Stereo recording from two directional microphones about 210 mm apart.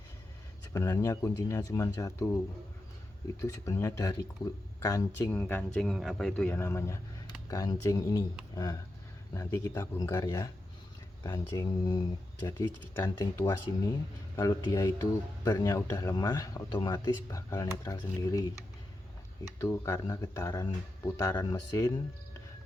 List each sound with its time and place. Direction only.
0.7 s speech: 15° left (ahead or behind)
3.4 s speech: 15° left (ahead or behind)
9.3 s speech: 15° left (ahead or behind)